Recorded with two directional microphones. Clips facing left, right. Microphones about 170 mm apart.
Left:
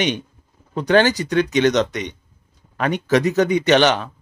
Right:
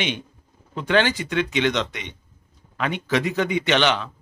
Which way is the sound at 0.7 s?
40° left (ahead or behind).